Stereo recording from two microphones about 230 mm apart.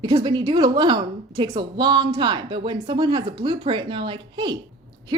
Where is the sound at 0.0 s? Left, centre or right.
Centre.